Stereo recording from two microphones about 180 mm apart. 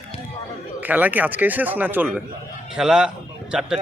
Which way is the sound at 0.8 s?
10° right (ahead or behind).